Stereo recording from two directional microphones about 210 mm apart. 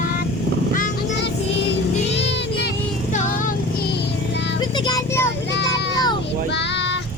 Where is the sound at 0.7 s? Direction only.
45° left (ahead or behind).